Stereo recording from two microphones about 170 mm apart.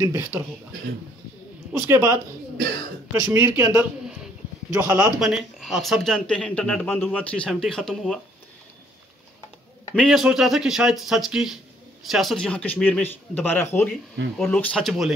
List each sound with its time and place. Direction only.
0.0 s speech: 20° right (ahead or behind)
1.7 s speech: 15° right (ahead or behind)
3.3 s speech: 15° right (ahead or behind)
5.2 s speech: centre (ahead or behind)
9.9 s a man's voice: centre (ahead or behind)